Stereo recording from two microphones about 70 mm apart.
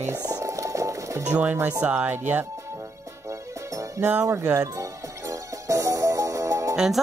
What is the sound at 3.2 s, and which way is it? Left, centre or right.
Music, right.